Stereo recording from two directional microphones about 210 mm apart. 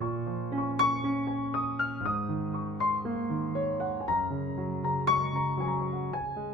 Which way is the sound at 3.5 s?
Centre (ahead or behind).